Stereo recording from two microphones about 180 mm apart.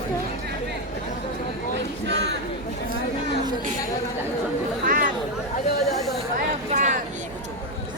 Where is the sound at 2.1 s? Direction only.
70° right (ahead or behind).